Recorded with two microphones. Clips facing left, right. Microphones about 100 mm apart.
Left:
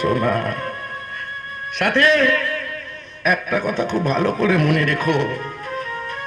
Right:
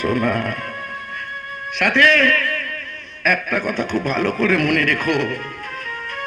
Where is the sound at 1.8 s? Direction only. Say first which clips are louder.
Right 1 dB; 45° left (ahead or behind).